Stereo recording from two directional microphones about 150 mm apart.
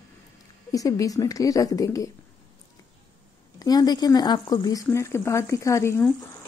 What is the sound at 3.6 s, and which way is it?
Speech, 25° left (ahead or behind).